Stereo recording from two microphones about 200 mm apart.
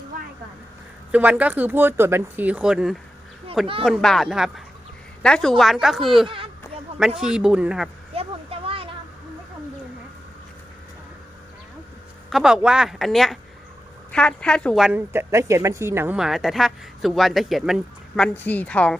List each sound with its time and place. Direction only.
1.1 s a woman's voice: 5° right (ahead or behind)
6.2 s speech: 25° right (ahead or behind)
7.2 s a woman's voice: 5° right (ahead or behind)
8.1 s a sound: 30° right (ahead or behind)
12.3 s a woman's voice: 5° right (ahead or behind)